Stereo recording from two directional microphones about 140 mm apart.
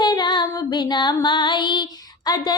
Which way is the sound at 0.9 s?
30° left (ahead or behind).